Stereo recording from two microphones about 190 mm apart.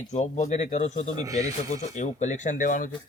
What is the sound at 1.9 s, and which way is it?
Speech, 40° left (ahead or behind).